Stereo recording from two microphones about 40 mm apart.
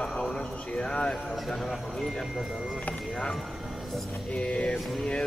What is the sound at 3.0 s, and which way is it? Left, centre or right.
Speech, centre.